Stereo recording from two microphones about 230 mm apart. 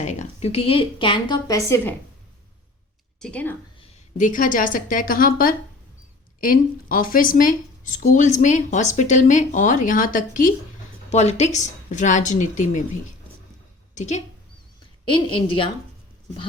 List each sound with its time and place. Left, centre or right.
0.0 s a woman's voice: left; by 2.0 s centre
3.2 s a woman's voice: centre
3.8 s a woman's voice: left